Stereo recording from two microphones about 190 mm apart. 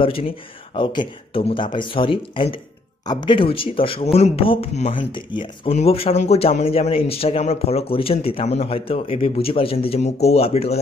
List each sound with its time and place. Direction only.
0.0 s speech: 30° left (ahead or behind)